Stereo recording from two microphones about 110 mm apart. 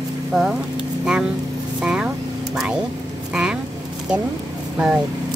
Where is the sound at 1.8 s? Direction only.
10° right (ahead or behind).